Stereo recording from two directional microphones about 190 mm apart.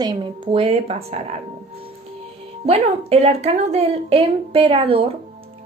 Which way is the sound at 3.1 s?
35° right (ahead or behind).